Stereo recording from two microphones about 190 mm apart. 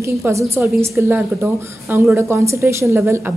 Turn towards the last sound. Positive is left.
turn(degrees=-15)  # may be behind; listen again after turning